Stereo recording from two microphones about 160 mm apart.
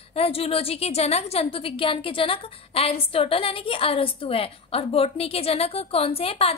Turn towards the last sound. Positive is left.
turn(degrees=35)  # may be behind; listen again after turning